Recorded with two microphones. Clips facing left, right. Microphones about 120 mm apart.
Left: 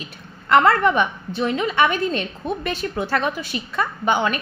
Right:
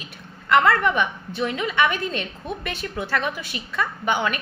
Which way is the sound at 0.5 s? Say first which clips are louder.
Left 3 dB; 35° left (ahead or behind).